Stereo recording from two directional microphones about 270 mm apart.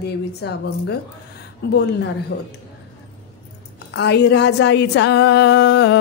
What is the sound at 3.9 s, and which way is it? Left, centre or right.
A woman's voice, left.